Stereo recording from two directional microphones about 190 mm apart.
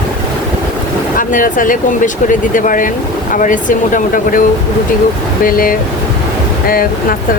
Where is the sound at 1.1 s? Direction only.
45° left (ahead or behind).